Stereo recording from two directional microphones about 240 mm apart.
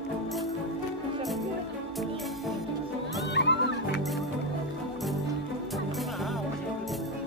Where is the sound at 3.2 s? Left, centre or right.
Left.